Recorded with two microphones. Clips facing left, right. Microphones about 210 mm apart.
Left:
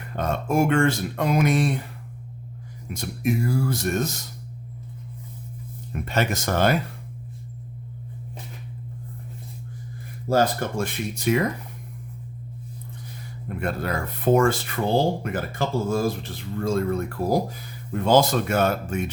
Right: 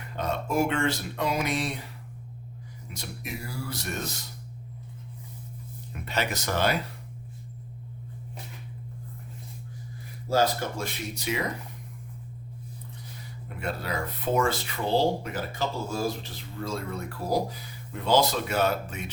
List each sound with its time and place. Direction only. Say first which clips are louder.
0.2 s speech: left 4 dB; 50° left (ahead or behind)
2.9 s speech: left 13 dB; 50° left (ahead or behind)
5.9 s speech: left 6 dB; 50° left (ahead or behind)
10.2 s speech: left 3 dB; 50° left (ahead or behind)
13.6 s speech: left 4 dB; 50° left (ahead or behind)